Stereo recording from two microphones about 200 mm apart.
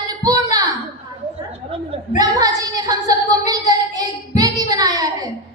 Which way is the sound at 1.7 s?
25° right (ahead or behind).